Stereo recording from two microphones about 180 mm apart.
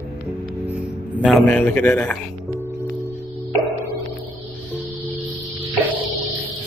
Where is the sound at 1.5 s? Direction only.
10° left (ahead or behind).